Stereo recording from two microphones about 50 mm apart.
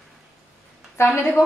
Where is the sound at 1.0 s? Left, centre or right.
Left.